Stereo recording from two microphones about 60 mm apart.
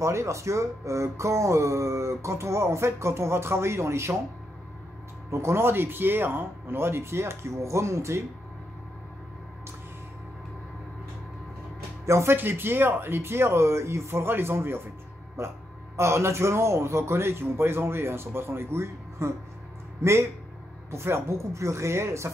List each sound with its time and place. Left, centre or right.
0.0 s speech: right
5.3 s a man's voice: right
12.1 s a man's voice: right
12.4 s speech: right
15.4 s a man's voice: right